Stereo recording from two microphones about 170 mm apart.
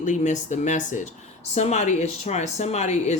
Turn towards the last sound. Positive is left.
turn(degrees=40)  # may be behind; listen again after turning